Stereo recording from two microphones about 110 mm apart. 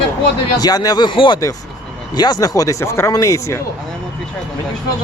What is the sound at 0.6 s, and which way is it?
Speech, 35° left (ahead or behind).